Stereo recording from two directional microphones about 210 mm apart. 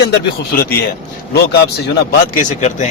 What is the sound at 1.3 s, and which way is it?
Speech, 50° left (ahead or behind).